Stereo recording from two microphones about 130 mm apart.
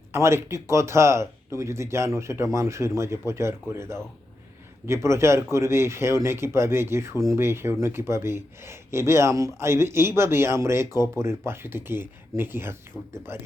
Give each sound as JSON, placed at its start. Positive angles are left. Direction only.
{"t": 0.1, "sound": "speech", "side_deg": -20}